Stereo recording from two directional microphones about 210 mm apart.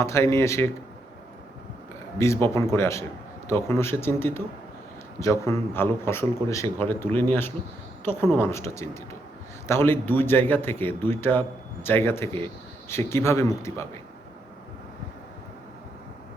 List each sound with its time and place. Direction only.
0.0 s a man's voice: 15° left (ahead or behind)
2.1 s a man's voice: 15° left (ahead or behind)